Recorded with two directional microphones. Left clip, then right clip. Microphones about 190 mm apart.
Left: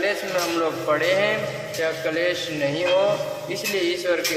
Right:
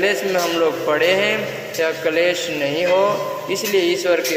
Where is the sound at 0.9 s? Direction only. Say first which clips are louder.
Right 2 dB; 20° right (ahead or behind).